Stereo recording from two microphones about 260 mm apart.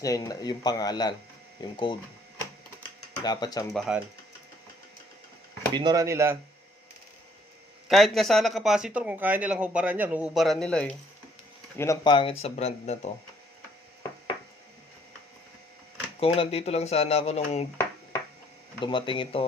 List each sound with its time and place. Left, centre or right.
0.0 s speech: centre
3.2 s speech: centre
3.7 s speech: centre
5.7 s speech: centre
7.9 s speech: centre
11.8 s speech: centre
16.2 s speech: left
18.8 s speech: centre